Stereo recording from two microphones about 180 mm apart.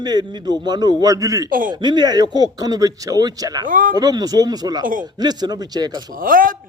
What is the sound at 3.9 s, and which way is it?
A man's voice, 20° right (ahead or behind).